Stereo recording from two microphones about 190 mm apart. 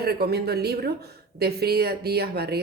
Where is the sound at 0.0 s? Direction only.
55° right (ahead or behind).